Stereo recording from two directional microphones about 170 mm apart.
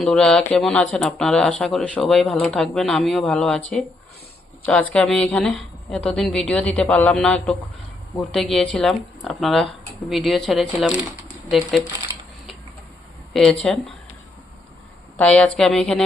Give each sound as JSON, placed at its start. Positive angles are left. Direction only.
{"t": 0.0, "sound": "speech", "side_deg": 5}
{"t": 4.6, "sound": "a woman's voice", "side_deg": 10}
{"t": 13.3, "sound": "speech", "side_deg": 0}
{"t": 15.2, "sound": "speech", "side_deg": 5}